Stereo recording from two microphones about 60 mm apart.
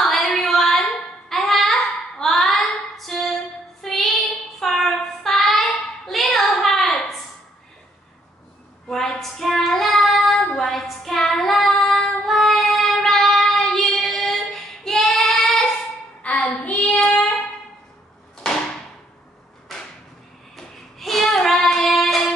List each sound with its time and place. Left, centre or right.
0.0 s a sound: centre
1.3 s child singing: centre
8.8 s child singing: centre
16.2 s child singing: left
20.5 s child singing: centre